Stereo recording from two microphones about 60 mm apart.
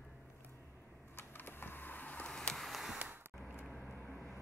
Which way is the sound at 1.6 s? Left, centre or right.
Left.